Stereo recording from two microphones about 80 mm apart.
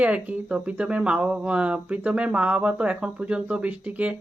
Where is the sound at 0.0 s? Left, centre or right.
Centre.